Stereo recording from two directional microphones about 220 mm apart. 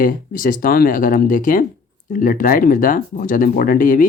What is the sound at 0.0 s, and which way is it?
Speech, 40° left (ahead or behind).